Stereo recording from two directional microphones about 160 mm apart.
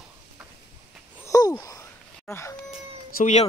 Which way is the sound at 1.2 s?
20° left (ahead or behind).